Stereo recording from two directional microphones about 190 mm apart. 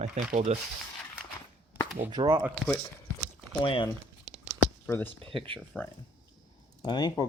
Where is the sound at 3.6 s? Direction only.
25° left (ahead or behind).